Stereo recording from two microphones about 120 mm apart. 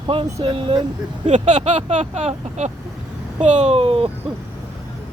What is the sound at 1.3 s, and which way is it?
Speech, 70° right (ahead or behind).